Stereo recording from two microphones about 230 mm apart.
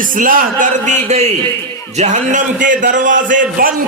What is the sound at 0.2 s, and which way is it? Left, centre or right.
A man's voice, right.